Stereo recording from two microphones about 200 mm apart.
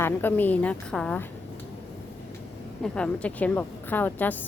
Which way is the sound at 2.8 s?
5° left (ahead or behind).